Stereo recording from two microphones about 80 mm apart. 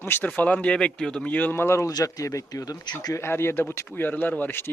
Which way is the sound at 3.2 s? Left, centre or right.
Left.